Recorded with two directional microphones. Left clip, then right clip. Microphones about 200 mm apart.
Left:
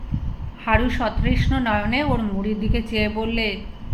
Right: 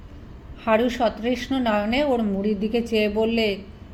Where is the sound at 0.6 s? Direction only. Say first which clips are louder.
Right 1 dB; 40° right (ahead or behind).